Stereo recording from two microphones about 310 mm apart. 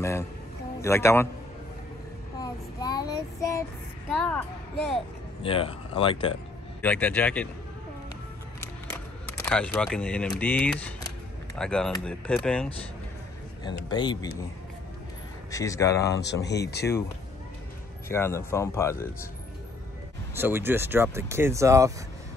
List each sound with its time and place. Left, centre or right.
0.7 s speech: centre
2.4 s child singing: centre
4.1 s speech: centre
5.4 s speech: centre
6.8 s speech: centre
8.5 s single-lens reflex camera: centre
10.4 s speech: centre
13.7 s speech: centre
15.5 s speech: centre
16.1 s speech: left
18.0 s speech: centre
20.3 s speech: centre